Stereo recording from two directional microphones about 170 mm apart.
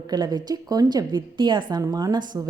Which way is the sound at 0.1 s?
25° right (ahead or behind).